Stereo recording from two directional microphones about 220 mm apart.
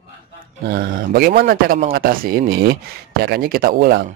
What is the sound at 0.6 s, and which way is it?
A man's voice, 45° right (ahead or behind).